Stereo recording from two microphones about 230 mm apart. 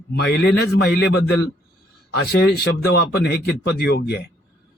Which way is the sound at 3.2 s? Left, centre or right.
Left.